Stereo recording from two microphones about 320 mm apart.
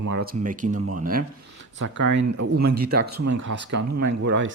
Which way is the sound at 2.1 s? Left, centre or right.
Right.